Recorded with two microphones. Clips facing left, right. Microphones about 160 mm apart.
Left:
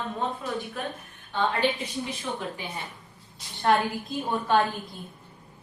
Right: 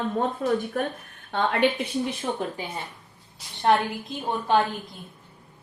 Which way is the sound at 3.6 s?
20° right (ahead or behind).